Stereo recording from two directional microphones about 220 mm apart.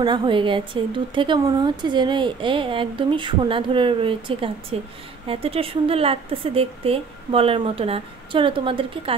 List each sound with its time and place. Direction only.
0.0 s a woman's voice: 20° right (ahead or behind)